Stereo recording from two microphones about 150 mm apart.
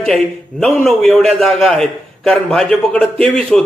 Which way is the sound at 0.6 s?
5° left (ahead or behind).